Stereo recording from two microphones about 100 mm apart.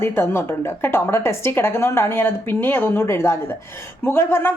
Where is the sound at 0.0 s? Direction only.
25° left (ahead or behind).